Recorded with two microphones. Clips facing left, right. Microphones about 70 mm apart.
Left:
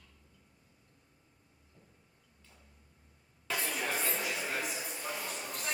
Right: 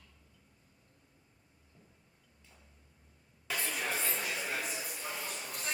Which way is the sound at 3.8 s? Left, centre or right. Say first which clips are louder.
Left 1 dB; centre.